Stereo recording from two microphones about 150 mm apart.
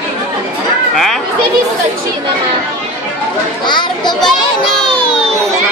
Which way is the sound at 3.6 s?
30° left (ahead or behind).